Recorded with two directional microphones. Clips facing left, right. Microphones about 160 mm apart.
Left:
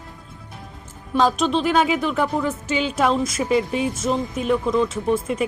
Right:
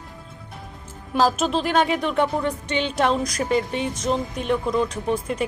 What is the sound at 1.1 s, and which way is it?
Speech, centre (ahead or behind).